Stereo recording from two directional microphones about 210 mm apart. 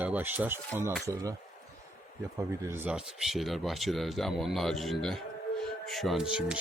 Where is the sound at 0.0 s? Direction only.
10° right (ahead or behind).